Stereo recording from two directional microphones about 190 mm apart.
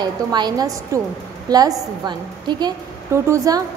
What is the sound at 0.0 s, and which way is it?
A woman's voice, 20° right (ahead or behind).